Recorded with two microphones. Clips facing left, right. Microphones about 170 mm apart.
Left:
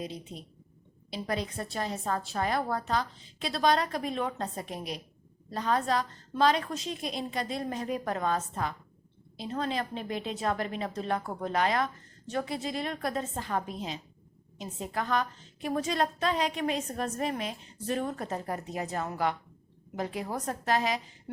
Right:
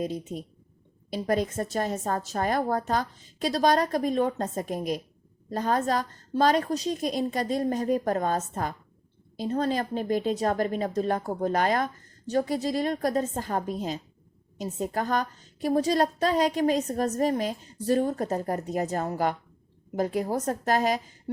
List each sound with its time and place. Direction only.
0.0 s a woman's voice: 45° right (ahead or behind)